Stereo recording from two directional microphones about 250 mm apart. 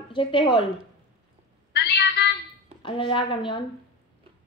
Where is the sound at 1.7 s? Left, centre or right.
Left.